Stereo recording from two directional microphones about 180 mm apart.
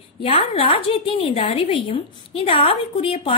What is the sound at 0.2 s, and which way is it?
A woman's voice, 30° left (ahead or behind).